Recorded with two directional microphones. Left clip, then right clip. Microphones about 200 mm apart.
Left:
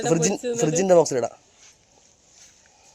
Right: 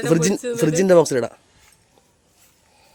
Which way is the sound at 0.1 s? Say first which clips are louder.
Right 4 dB; 40° right (ahead or behind).